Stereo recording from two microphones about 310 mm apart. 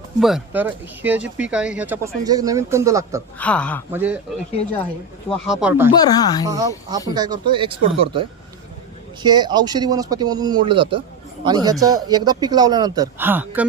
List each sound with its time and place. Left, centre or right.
0.2 s speech: centre
3.3 s speech: centre
5.9 s speech: centre
6.4 s speech: centre